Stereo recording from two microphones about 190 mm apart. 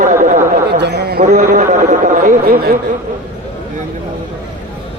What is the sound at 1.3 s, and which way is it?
Speech, 40° right (ahead or behind).